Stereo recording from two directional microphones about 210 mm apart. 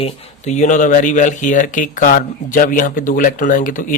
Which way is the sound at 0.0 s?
35° left (ahead or behind).